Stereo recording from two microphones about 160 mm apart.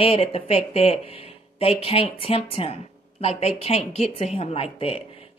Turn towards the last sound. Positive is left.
turn(degrees=35)  # may be behind; listen again after turning